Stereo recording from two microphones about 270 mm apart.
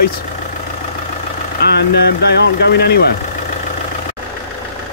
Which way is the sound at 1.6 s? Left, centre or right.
Left.